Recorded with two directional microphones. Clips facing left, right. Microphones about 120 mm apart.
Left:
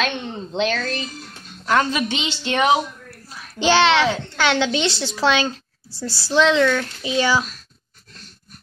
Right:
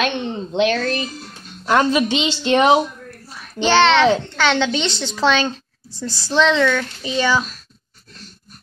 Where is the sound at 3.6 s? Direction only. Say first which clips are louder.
Right 3 dB; 10° left (ahead or behind).